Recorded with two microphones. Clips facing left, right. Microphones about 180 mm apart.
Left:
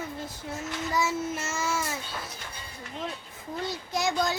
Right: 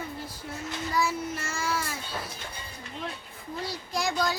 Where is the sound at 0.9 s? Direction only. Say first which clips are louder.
Even; 20° left (ahead or behind).